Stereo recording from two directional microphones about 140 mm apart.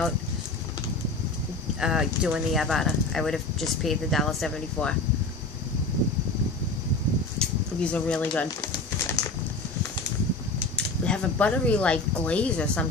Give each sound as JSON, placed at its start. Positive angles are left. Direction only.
{"t": 1.8, "sound": "speech", "side_deg": -5}
{"t": 7.3, "sound": "speech", "side_deg": 5}
{"t": 8.5, "sound": "a sound", "side_deg": 20}
{"t": 11.1, "sound": "speech", "side_deg": 10}